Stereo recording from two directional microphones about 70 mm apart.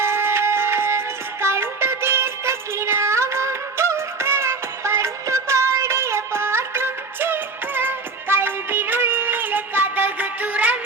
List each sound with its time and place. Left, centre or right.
0.0 s music: right